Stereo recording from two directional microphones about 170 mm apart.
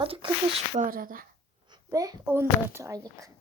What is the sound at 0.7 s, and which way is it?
Speech, 50° right (ahead or behind).